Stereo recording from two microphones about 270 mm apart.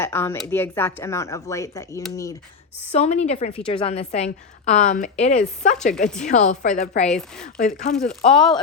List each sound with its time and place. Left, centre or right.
0.0 s speech: centre
2.9 s speech: left